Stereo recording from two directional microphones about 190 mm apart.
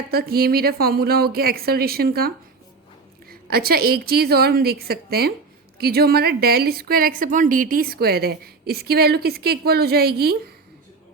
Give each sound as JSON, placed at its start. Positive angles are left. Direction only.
{"t": 0.1, "sound": "a woman's voice", "side_deg": -55}